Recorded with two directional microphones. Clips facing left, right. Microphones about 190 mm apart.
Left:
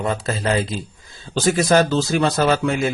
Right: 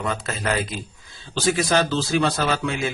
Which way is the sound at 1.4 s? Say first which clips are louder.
Left 4 dB; 45° left (ahead or behind).